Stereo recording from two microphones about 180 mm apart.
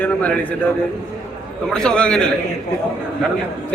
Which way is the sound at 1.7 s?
5° left (ahead or behind).